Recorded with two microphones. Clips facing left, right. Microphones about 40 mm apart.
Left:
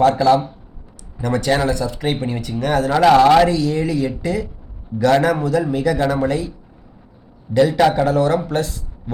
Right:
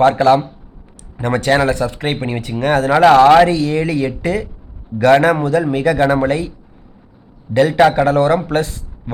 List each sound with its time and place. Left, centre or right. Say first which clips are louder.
0.2 s speech: right 3 dB; right
3.4 s speech: right 3 dB; right
7.8 s speech: right 3 dB; right